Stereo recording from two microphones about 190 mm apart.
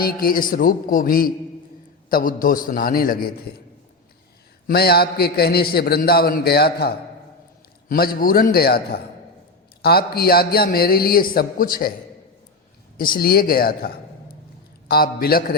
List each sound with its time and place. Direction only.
0.0 s a man's voice: 50° left (ahead or behind)
4.6 s a man's voice: 55° left (ahead or behind)
13.0 s a man's voice: 50° left (ahead or behind)